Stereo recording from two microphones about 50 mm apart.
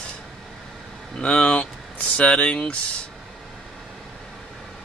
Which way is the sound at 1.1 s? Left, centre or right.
Centre.